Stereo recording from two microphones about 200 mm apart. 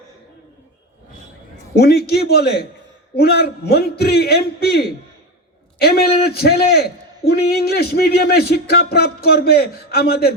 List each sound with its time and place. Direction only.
1.7 s speech: 55° left (ahead or behind)